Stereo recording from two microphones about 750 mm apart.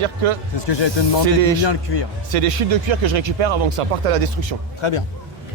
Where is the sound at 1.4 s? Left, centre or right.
Right.